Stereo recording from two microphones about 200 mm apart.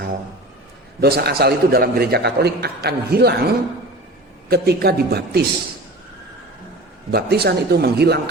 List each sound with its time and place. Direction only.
1.0 s a man's voice: 55° right (ahead or behind)
7.1 s a man's voice: 50° right (ahead or behind)